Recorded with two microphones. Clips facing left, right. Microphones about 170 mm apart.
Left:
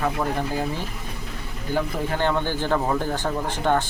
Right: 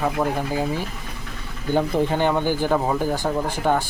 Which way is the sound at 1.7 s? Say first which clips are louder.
Right 5 dB; 20° right (ahead or behind).